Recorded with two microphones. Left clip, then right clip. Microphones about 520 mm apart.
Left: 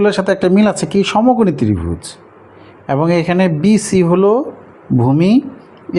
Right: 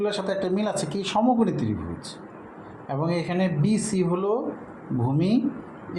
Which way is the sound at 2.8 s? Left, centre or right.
Left.